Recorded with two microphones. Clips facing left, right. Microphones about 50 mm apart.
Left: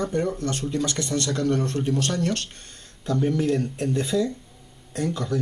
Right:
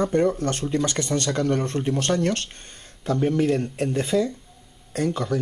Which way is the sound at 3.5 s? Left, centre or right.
Centre.